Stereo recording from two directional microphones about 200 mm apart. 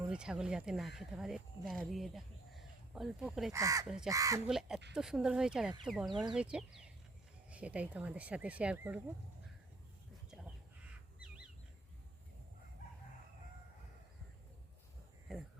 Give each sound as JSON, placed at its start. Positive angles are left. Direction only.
{"t": 0.1, "sound": "speech", "side_deg": -5}
{"t": 3.5, "sound": "speech", "side_deg": -15}
{"t": 3.8, "sound": "speech", "side_deg": -5}
{"t": 4.1, "sound": "speech", "side_deg": -15}
{"t": 4.4, "sound": "speech", "side_deg": 0}
{"t": 15.3, "sound": "speech", "side_deg": 0}